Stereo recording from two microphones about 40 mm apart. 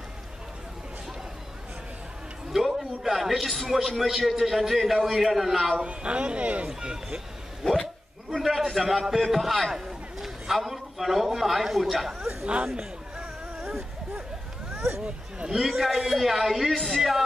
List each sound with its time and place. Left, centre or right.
2.5 s a man's voice: centre
5.9 s speech: right
6.8 s speech: right
8.3 s a sound: centre
9.0 s a man's voice: centre
12.4 s speech: right
15.0 s a sound: right
15.5 s a man's voice: centre